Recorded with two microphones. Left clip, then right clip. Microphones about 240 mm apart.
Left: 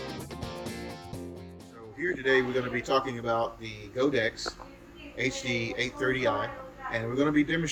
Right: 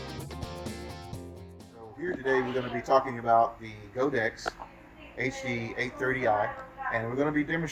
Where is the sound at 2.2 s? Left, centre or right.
Centre.